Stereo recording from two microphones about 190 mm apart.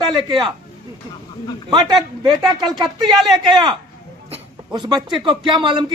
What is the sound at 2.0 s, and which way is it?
Speech, centre (ahead or behind).